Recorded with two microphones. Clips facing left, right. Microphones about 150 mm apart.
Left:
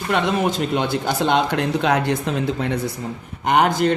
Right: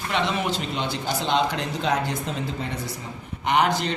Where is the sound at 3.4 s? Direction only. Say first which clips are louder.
Left 5 dB; 50° left (ahead or behind).